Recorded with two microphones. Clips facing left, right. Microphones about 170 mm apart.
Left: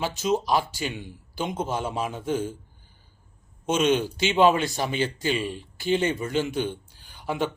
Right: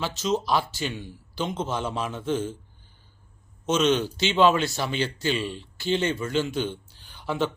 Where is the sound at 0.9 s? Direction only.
15° left (ahead or behind).